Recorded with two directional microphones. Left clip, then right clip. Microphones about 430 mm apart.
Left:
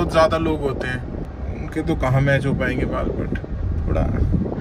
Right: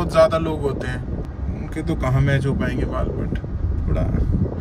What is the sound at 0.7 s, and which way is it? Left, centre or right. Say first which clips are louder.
Speech: left 1 dB; centre.